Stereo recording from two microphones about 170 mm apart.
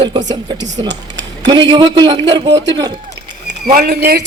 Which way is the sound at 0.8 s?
90° right.